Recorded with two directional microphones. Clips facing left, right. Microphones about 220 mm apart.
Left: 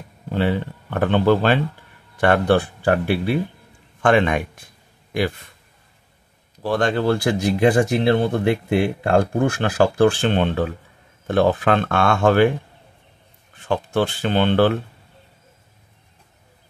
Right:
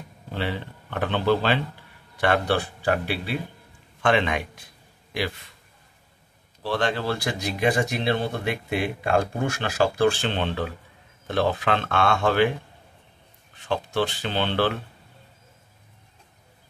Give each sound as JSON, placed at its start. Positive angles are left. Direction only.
{"t": 0.3, "sound": "speech", "side_deg": 50}
{"t": 6.6, "sound": "speech", "side_deg": 45}
{"t": 13.6, "sound": "speech", "side_deg": 50}